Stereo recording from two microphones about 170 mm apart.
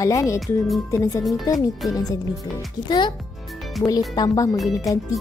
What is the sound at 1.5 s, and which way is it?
Music, 20° left (ahead or behind).